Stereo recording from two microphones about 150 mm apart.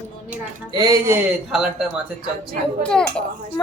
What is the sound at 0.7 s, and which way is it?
Speech, 25° right (ahead or behind).